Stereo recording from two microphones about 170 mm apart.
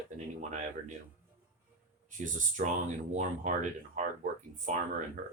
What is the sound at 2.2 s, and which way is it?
Speech, 50° right (ahead or behind).